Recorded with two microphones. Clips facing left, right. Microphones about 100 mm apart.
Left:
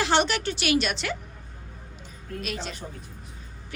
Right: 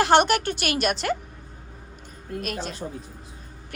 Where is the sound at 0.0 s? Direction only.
50° right (ahead or behind).